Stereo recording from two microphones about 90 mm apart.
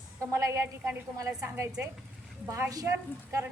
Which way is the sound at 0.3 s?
35° right (ahead or behind).